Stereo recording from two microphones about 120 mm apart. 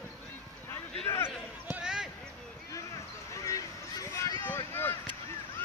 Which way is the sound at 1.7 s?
5° right (ahead or behind).